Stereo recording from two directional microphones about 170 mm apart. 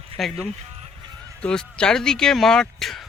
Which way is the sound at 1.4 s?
5° left (ahead or behind).